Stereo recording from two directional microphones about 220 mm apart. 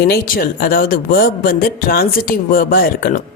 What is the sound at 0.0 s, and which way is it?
A man's voice, 45° left (ahead or behind).